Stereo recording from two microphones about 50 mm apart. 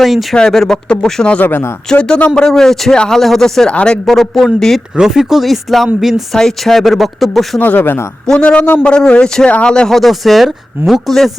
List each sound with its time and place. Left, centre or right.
0.0 s speech: centre
0.3 s speech: centre
1.5 s speech: left
1.9 s a man's voice: centre
2.4 s speech: centre
3.7 s a man's voice: left
4.0 s speech: centre
4.9 s speech: centre
6.3 s speech: centre
7.6 s speech: left
8.3 s a man's voice: left
9.9 s speech: centre